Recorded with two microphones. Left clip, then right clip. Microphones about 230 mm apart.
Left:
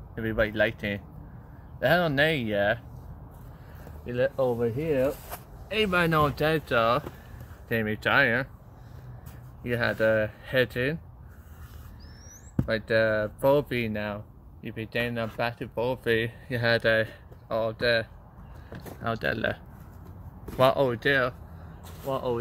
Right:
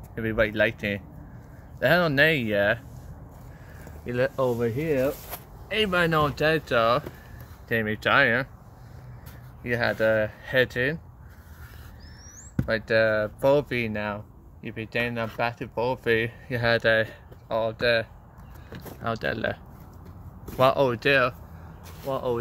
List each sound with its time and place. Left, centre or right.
0.1 s speech: centre
4.0 s speech: right
4.7 s speech: centre
5.7 s speech: centre
9.6 s speech: centre
12.5 s speech: centre
20.5 s speech: centre
22.0 s speech: centre